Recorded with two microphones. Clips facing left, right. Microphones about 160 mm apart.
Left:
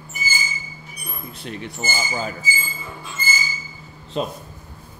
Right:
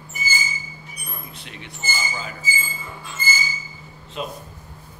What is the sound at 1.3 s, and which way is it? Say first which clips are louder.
Speech: left 7 dB; 40° left (ahead or behind).